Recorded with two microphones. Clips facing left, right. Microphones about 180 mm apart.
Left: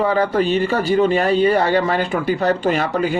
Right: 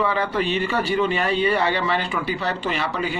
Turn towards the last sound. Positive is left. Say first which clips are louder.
# left 7 dB
turn(degrees=45)  # may be behind; listen again after turning